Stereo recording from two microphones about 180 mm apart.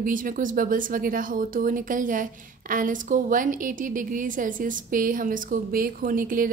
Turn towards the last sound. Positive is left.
turn(degrees=-50)  # may be behind; listen again after turning